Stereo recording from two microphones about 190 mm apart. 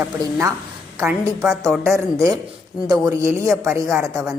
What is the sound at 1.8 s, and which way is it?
A woman's voice, 15° right (ahead or behind).